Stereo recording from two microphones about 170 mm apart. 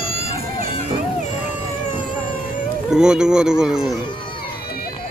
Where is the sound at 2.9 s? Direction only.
5° right (ahead or behind).